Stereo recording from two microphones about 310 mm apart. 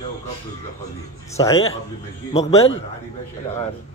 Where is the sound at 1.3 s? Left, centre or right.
Centre.